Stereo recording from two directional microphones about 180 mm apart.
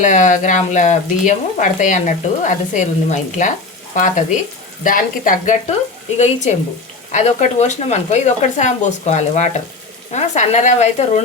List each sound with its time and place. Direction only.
0.0 s frying: 45° left (ahead or behind)
6.1 s speech: 40° left (ahead or behind)